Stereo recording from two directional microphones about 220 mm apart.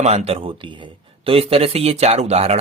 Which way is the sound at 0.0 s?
30° right (ahead or behind).